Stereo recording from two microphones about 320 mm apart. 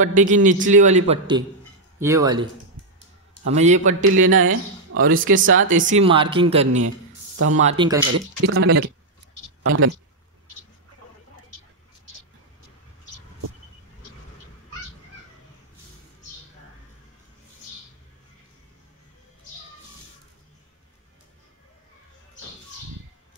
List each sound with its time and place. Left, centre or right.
0.0 s speech: right
3.4 s speech: right
4.0 s speech: right
5.2 s speech: right
8.1 s speech: right